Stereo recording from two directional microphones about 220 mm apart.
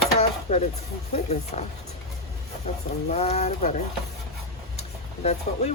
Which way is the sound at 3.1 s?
30° left (ahead or behind).